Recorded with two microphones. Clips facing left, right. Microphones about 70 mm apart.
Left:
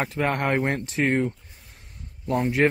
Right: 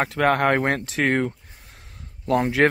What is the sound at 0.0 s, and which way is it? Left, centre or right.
Speech, right.